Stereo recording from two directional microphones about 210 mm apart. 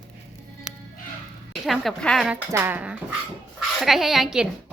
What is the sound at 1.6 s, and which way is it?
Speech, centre (ahead or behind).